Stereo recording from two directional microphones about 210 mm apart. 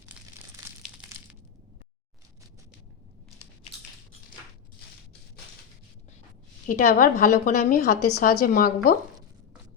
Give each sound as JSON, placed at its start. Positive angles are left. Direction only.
{"t": 6.7, "sound": "a woman's voice", "side_deg": 40}